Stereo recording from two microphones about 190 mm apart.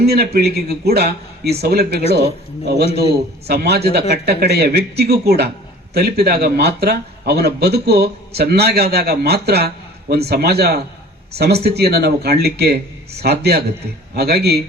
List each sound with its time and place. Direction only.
0.0 s a man's voice: 55° right (ahead or behind)